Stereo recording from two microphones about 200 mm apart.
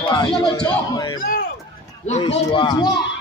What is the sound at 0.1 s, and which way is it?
Speech, 20° left (ahead or behind).